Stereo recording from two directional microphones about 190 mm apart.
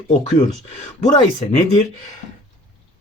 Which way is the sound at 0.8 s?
35° left (ahead or behind).